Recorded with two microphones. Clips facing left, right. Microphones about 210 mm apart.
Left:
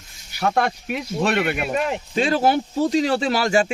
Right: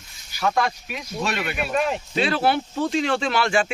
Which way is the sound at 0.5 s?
60° left (ahead or behind).